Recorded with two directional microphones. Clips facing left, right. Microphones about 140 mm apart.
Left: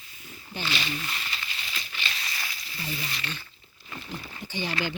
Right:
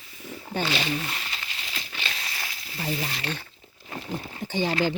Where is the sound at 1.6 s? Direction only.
75° right (ahead or behind); by 2.9 s 55° right (ahead or behind).